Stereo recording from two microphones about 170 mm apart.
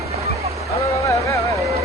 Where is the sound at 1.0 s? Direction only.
20° left (ahead or behind).